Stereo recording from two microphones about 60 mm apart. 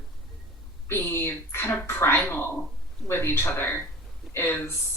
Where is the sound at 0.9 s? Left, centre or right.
Left.